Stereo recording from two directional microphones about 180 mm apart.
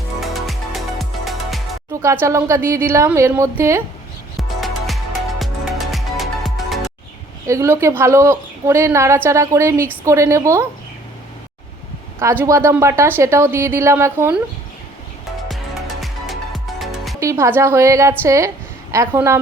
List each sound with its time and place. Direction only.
0.3 s music: centre (ahead or behind)
1.9 s music: 15° right (ahead or behind)
2.2 s a woman's voice: 15° right (ahead or behind)
4.4 s music: centre (ahead or behind)
7.4 s a woman's voice: 15° right (ahead or behind)
12.2 s a woman's voice: 15° right (ahead or behind)
15.4 s music: centre (ahead or behind)
17.2 s a woman's voice: 15° right (ahead or behind)